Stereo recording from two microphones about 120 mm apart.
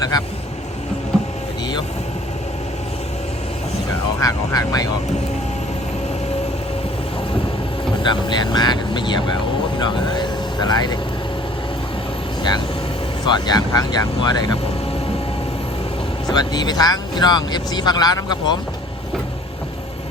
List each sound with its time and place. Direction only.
4.2 s speech: 30° left (ahead or behind)
8.1 s speech: 40° left (ahead or behind)
12.4 s speech: 35° left (ahead or behind)
16.3 s speech: 35° left (ahead or behind)